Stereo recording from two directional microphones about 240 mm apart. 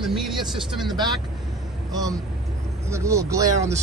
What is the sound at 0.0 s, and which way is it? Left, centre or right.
Vehicle, centre.